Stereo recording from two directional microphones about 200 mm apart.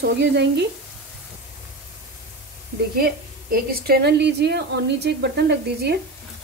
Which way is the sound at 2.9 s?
50° right (ahead or behind).